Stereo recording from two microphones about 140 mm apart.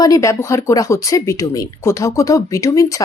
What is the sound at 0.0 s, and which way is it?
Speech, 25° left (ahead or behind).